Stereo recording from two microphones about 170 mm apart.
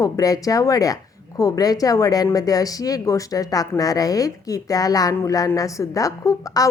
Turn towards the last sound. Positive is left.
turn(degrees=20)  # may be behind; listen again after turning